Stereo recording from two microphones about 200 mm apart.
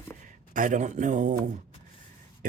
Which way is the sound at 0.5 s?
40° right (ahead or behind).